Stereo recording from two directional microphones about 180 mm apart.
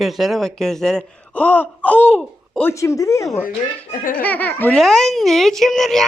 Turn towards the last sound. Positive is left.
turn(degrees=0)  # may be behind; listen again after turning